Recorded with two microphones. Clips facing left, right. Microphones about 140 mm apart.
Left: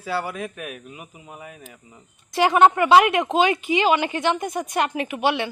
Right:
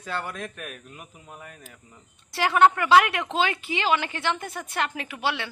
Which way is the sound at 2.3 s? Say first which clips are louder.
Left 4 dB; 20° left (ahead or behind).